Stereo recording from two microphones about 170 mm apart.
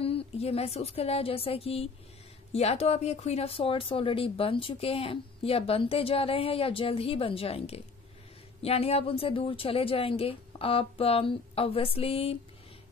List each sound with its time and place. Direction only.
0.0 s speech: 35° left (ahead or behind)